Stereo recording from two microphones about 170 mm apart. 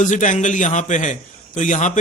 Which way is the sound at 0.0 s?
45° left (ahead or behind).